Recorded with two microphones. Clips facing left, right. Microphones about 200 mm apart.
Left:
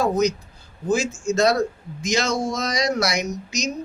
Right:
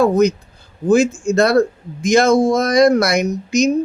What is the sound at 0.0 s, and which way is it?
A man's voice, 60° right (ahead or behind).